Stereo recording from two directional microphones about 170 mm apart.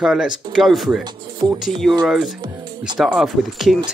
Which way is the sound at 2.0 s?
Centre (ahead or behind).